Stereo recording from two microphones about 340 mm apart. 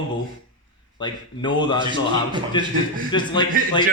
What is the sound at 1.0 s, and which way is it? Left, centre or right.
Speech, centre.